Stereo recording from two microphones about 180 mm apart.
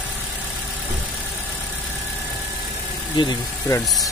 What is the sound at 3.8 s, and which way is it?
Speech, centre (ahead or behind).